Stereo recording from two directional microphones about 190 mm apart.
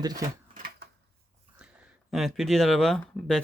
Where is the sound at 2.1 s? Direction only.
Centre (ahead or behind).